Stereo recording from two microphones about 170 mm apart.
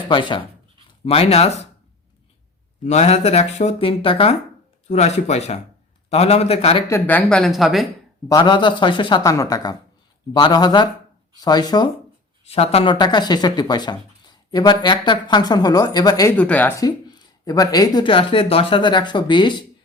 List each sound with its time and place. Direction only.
0.1 s speech: 30° left (ahead or behind)
2.8 s speech: 40° left (ahead or behind)
6.8 s speech: 15° left (ahead or behind)
8.3 s speech: 25° left (ahead or behind)
12.5 s speech: 35° left (ahead or behind)
16.4 s speech: 10° left (ahead or behind); by 19.6 s 25° left (ahead or behind)